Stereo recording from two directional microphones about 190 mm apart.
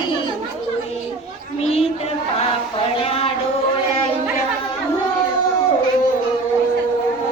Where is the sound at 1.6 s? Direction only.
30° left (ahead or behind).